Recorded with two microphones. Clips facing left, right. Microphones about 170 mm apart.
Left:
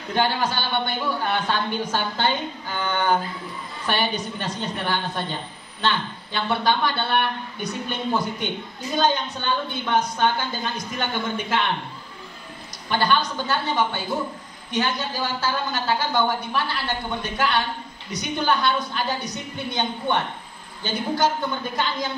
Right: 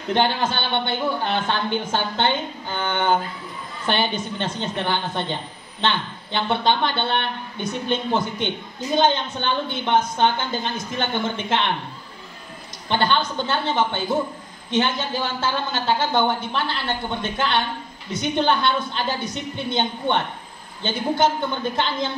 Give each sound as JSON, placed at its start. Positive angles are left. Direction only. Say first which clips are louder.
{"t": 0.1, "sound": "speech", "louder": "right 2 dB", "side_deg": -25}
{"t": 12.9, "sound": "speech", "louder": "right 1 dB", "side_deg": -25}